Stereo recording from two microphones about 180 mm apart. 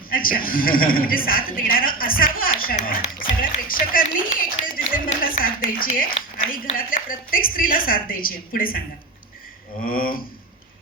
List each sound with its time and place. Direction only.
0.1 s a man's voice: 50° left (ahead or behind)
9.9 s a man's voice: 50° left (ahead or behind)